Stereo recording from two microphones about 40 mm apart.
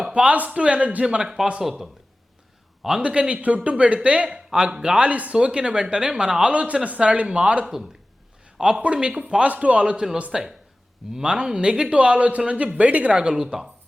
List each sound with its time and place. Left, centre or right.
0.1 s a man's voice: right
1.2 s speech: centre
3.0 s speech: right
4.4 s speech: centre
4.9 s speech: right
5.4 s speech: right
6.5 s speech: right
7.6 s speech: centre
8.5 s speech: right
10.3 s speech: centre
11.1 s speech: right
13.1 s speech: centre